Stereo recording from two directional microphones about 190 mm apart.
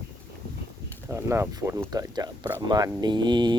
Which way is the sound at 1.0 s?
15° right (ahead or behind).